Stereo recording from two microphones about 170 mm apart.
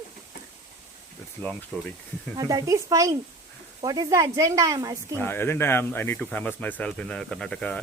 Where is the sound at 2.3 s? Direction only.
20° right (ahead or behind).